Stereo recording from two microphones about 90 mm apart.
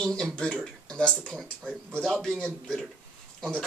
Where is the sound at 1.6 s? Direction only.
20° right (ahead or behind).